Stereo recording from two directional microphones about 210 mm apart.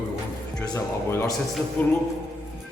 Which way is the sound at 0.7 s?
10° left (ahead or behind).